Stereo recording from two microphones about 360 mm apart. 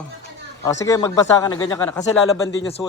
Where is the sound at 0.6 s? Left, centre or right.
Centre.